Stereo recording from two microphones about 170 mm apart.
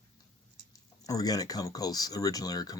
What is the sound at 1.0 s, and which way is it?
Speech, 20° left (ahead or behind).